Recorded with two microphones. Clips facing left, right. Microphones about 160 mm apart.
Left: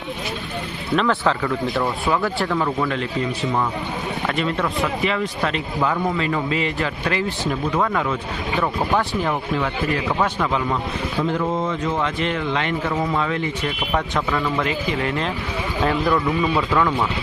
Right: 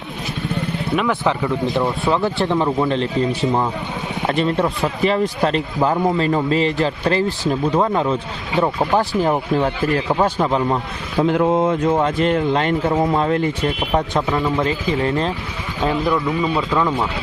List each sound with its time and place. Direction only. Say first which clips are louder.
0.9 s speech: even; 15° right (ahead or behind)
4.3 s a man's voice: right 6 dB; 30° right (ahead or behind)
11.2 s speech: right 7 dB; 55° right (ahead or behind)
11.9 s a man's voice: right 6 dB; 40° right (ahead or behind)
13.9 s speech: right 2 dB; 25° right (ahead or behind)
15.8 s speech: right 1 dB; 20° right (ahead or behind)